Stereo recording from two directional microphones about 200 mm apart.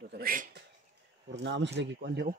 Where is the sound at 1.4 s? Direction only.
60° right (ahead or behind).